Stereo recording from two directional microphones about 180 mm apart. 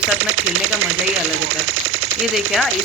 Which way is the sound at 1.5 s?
90° right.